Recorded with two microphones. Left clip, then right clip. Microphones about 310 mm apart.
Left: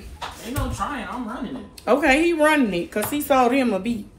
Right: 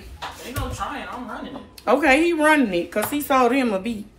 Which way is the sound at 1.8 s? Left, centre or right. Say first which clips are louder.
Right 1 dB; centre.